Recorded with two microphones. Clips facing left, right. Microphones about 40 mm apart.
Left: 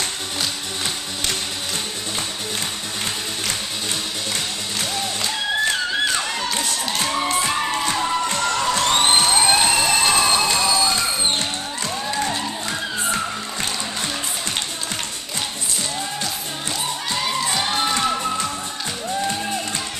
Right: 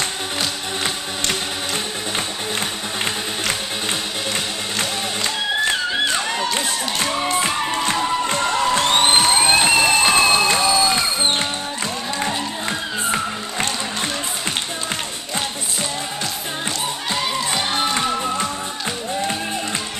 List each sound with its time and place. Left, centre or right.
5.2 s music: centre
7.8 s music: centre
12.2 s music: centre
17.1 s children shouting: centre
17.5 s music: centre